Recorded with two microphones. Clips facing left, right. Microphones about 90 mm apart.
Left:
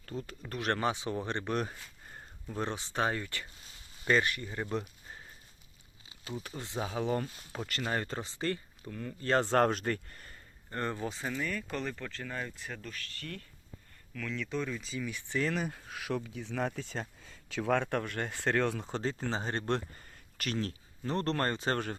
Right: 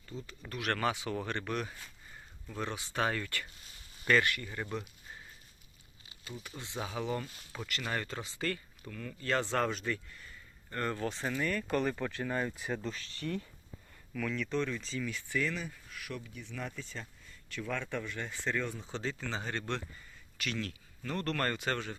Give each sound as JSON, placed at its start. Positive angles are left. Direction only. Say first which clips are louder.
{"t": 0.0, "sound": "speech", "louder": "left 4 dB", "side_deg": 50}
{"t": 0.7, "sound": "speech", "louder": "left 1 dB", "side_deg": 25}
{"t": 1.5, "sound": "a sound", "louder": "left 3 dB", "side_deg": 45}
{"t": 2.5, "sound": "speech", "louder": "left 3 dB", "side_deg": 30}
{"t": 6.3, "sound": "speech", "louder": "left 4 dB", "side_deg": 40}
{"t": 9.3, "sound": "speech", "louder": "left 5 dB", "side_deg": 45}
{"t": 10.7, "sound": "speech", "louder": "even", "side_deg": 20}
{"t": 11.1, "sound": "speech", "louder": "right 2 dB", "side_deg": 0}
{"t": 14.1, "sound": "speech", "louder": "right 2 dB", "side_deg": -5}
{"t": 15.3, "sound": "speech", "louder": "left 2 dB", "side_deg": 35}
{"t": 15.7, "sound": "speech", "louder": "left 7 dB", "side_deg": 90}
{"t": 18.9, "sound": "speech", "louder": "left 4 dB", "side_deg": 40}
{"t": 20.0, "sound": "a sound", "louder": "even", "side_deg": 55}
{"t": 20.5, "sound": "speech", "louder": "left 4 dB", "side_deg": 35}